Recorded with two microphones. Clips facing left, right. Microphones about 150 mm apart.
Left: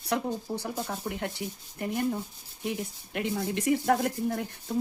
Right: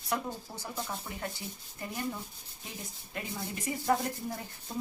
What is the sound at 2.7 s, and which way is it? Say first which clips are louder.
A woman's voice: left 12 dB; 70° left (ahead or behind).